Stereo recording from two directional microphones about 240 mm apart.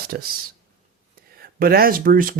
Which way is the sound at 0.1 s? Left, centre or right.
Right.